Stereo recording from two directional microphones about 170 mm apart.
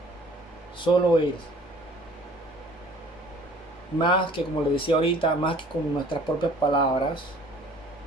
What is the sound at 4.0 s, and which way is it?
Speech, 30° left (ahead or behind).